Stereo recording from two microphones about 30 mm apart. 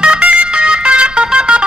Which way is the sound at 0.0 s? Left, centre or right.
Right.